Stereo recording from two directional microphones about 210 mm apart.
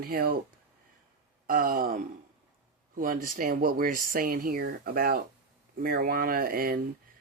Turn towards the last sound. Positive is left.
turn(degrees=-45)  # may be behind; listen again after turning